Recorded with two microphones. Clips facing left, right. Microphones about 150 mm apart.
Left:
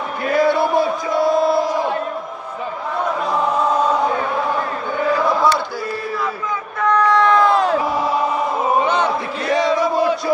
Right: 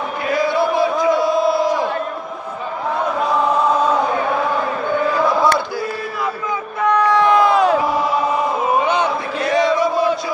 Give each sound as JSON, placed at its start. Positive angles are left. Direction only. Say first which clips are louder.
{"t": 0.4, "sound": "a sound", "louder": "left 1 dB", "side_deg": 55}
{"t": 6.8, "sound": "crowd", "louder": "even", "side_deg": -10}
{"t": 9.4, "sound": "chant", "louder": "right 2 dB", "side_deg": 35}